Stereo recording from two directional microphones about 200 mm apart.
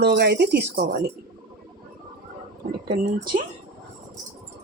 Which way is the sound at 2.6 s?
45° right (ahead or behind).